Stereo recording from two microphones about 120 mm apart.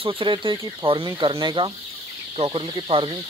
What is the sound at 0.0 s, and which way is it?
Speech, 45° right (ahead or behind).